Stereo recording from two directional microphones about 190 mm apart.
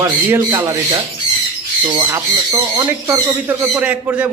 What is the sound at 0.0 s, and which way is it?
Speech, 15° right (ahead or behind).